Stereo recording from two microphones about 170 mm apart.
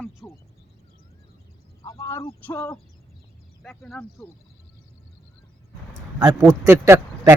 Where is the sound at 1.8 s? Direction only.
20° left (ahead or behind).